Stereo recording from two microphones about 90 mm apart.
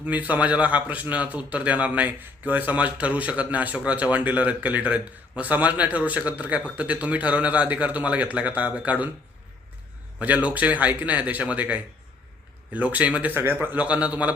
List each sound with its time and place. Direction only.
0.0 s a man's voice: 15° right (ahead or behind)
10.2 s a man's voice: 15° right (ahead or behind)